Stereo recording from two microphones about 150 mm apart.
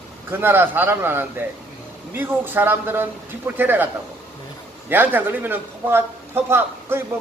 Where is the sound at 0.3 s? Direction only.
15° right (ahead or behind).